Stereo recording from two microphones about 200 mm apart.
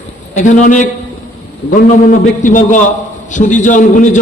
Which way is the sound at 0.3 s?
40° left (ahead or behind).